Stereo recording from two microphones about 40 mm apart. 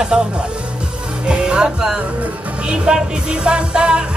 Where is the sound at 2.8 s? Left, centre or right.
Right.